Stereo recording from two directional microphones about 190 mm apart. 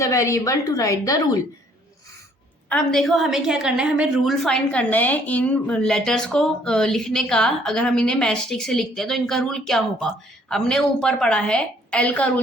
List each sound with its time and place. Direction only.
0.0 s a woman's voice: 15° left (ahead or behind)
2.6 s a woman's voice: 5° left (ahead or behind)